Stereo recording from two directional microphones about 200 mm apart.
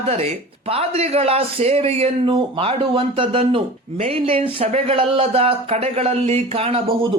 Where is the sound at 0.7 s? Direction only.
30° right (ahead or behind).